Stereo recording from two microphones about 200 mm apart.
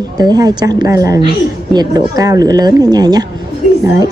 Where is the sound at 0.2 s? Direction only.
20° right (ahead or behind).